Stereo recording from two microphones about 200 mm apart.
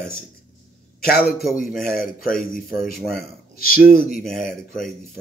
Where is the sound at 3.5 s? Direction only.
45° left (ahead or behind).